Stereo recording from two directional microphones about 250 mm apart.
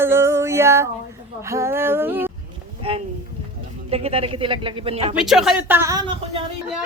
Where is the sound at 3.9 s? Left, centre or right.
Right.